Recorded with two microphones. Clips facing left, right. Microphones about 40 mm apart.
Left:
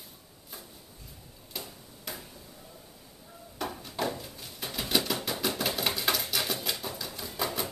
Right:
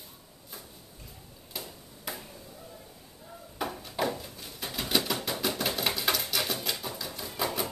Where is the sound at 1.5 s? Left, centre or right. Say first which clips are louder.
Even; centre.